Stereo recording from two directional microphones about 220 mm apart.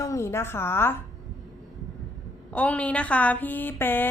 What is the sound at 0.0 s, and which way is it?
A woman's voice, 15° left (ahead or behind).